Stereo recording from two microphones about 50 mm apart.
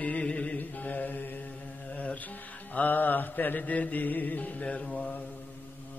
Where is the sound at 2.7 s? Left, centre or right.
Left.